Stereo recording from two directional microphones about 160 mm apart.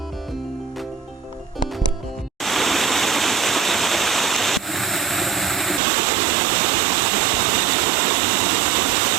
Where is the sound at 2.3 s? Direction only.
Centre (ahead or behind).